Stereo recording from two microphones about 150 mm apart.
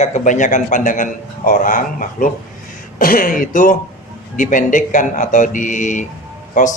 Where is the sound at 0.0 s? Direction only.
55° left (ahead or behind).